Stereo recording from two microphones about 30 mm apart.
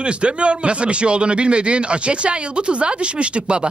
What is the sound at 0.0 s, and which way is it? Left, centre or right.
A man's voice, right.